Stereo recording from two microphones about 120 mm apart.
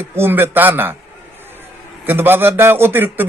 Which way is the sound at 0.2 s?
20° right (ahead or behind).